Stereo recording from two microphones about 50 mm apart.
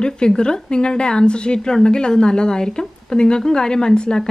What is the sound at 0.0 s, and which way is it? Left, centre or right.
A woman's voice, centre.